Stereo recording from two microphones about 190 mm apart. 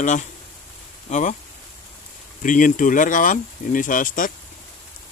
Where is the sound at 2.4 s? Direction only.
45° left (ahead or behind).